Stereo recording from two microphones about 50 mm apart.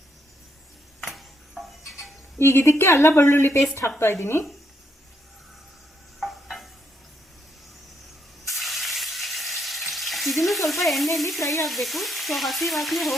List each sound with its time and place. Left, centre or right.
1.0 s music: centre
2.4 s a woman's voice: left
3.1 s a woman's voice: left
6.1 s stir: centre
8.4 s frying: centre
11.3 s frying: left
11.6 s frying: centre